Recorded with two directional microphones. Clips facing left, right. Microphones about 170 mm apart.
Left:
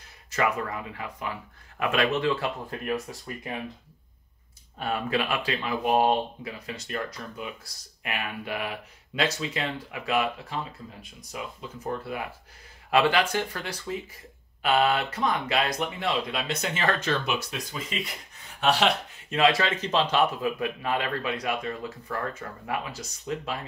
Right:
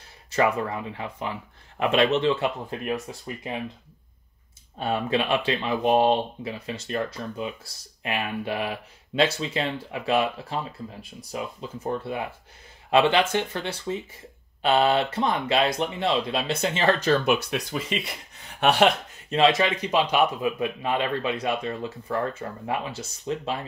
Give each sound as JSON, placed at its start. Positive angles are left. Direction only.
{"t": 0.4, "sound": "speech", "side_deg": -25}
{"t": 4.7, "sound": "speech", "side_deg": -25}
{"t": 17.3, "sound": "speech", "side_deg": -70}
{"t": 18.6, "sound": "speech", "side_deg": -55}
{"t": 19.3, "sound": "speech", "side_deg": -25}